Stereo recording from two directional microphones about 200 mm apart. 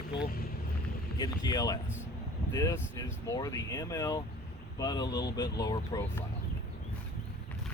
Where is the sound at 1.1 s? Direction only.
20° left (ahead or behind).